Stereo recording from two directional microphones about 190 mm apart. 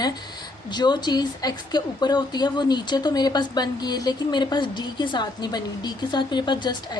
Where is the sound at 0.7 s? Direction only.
20° left (ahead or behind).